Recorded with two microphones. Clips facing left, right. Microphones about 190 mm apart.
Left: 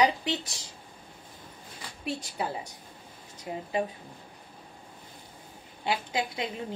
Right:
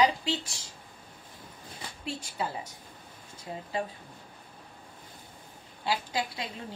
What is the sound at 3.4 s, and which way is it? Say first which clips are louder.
Speech: left 4 dB; 20° left (ahead or behind).